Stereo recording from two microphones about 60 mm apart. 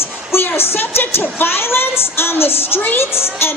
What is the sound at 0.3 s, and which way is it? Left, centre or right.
A woman's voice, left.